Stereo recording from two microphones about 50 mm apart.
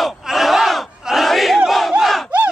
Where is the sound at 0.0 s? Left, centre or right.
Centre.